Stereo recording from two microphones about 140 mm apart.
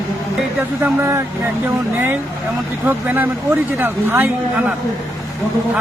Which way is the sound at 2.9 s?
15° right (ahead or behind).